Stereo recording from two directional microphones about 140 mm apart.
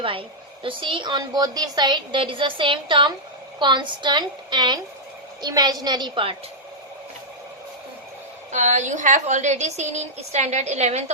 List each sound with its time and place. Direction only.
0.0 s a woman's voice: 40° right (ahead or behind)
8.5 s a woman's voice: 60° right (ahead or behind)